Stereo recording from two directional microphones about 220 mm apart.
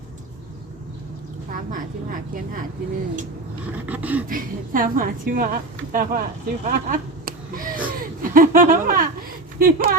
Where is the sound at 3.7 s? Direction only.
5° right (ahead or behind).